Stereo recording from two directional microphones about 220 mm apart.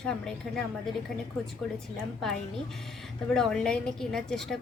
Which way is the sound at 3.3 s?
5° left (ahead or behind).